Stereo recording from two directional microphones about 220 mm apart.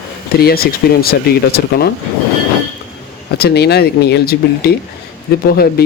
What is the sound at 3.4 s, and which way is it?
Speech, 45° left (ahead or behind).